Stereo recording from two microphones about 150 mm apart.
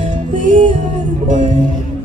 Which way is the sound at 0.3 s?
55° right (ahead or behind).